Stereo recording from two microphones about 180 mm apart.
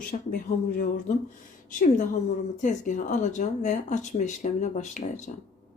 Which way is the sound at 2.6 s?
45° left (ahead or behind).